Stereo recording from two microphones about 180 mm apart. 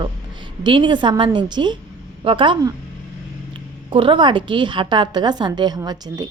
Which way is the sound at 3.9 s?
30° right (ahead or behind).